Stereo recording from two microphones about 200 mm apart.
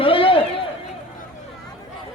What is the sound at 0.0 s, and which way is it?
Run, 25° left (ahead or behind).